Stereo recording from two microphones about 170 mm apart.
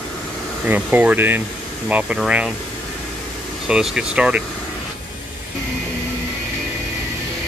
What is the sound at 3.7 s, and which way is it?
Speech, 5° right (ahead or behind).